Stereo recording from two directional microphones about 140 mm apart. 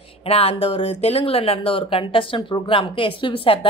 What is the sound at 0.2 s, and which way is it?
Speech, 45° left (ahead or behind).